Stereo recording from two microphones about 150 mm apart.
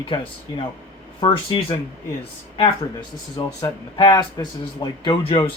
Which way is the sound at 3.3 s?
25° left (ahead or behind).